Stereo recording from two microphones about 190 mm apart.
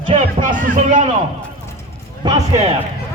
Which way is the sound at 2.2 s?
20° right (ahead or behind).